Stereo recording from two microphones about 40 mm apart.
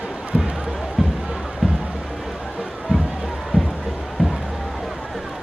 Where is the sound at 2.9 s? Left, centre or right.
Right.